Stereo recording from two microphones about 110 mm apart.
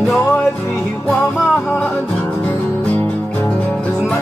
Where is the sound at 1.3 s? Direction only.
5° left (ahead or behind).